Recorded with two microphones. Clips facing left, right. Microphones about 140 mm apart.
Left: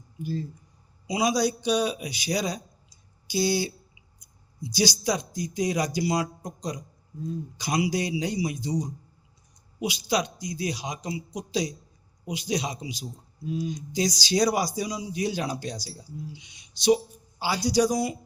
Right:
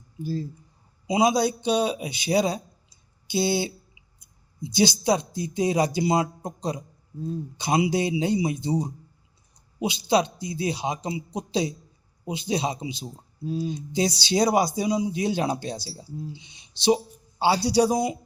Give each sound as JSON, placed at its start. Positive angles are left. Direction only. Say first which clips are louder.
{"t": 0.2, "sound": "speech", "louder": "right 2 dB", "side_deg": -35}
{"t": 1.1, "sound": "speech", "louder": "right 3 dB", "side_deg": -25}
{"t": 4.7, "sound": "speech", "louder": "right 4 dB", "side_deg": -25}